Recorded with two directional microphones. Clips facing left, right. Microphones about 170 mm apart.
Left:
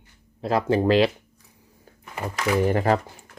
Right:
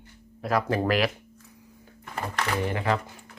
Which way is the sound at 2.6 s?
40° left (ahead or behind).